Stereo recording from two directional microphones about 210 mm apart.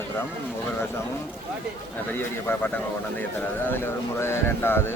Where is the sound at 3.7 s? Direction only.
10° left (ahead or behind).